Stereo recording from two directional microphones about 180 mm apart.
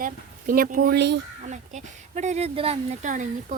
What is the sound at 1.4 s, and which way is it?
Speech, 40° right (ahead or behind).